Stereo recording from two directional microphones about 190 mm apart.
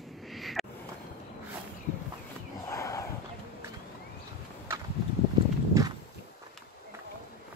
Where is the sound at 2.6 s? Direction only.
15° left (ahead or behind).